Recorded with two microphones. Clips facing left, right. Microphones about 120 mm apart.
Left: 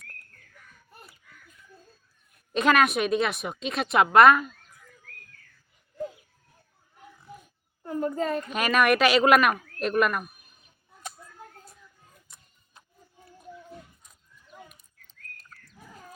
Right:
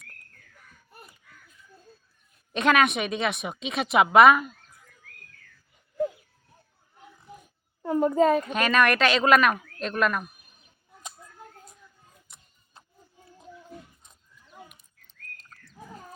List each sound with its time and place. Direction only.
2.5 s a woman's voice: centre (ahead or behind)
7.8 s a sound: 90° right
8.5 s a woman's voice: 5° left (ahead or behind)